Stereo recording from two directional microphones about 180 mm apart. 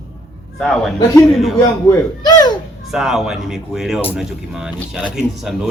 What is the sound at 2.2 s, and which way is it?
Children playing, 20° left (ahead or behind).